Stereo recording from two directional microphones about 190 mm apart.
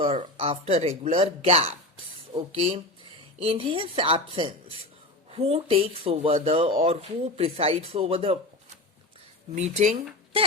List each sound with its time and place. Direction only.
0.0 s speech: 30° right (ahead or behind)
9.6 s speech: 35° right (ahead or behind)